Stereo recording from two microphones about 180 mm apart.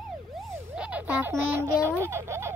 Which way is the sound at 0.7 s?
5° right (ahead or behind).